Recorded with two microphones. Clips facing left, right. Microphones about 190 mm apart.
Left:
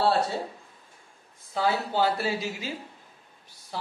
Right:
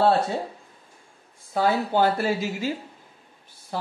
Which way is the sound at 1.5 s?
55° right (ahead or behind).